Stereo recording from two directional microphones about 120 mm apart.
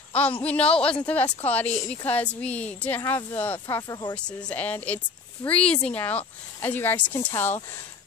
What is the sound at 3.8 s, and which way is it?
Speech, 30° left (ahead or behind).